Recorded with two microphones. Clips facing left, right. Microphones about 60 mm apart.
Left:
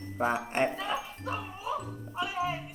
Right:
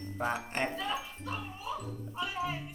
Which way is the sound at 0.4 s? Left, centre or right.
Centre.